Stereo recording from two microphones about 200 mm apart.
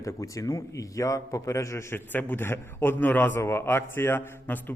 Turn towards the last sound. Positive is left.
turn(degrees=10)  # may be behind; listen again after turning